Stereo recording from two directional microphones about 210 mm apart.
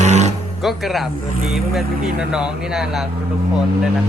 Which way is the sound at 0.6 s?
Centre (ahead or behind).